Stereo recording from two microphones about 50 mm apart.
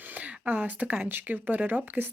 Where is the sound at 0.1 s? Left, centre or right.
Right.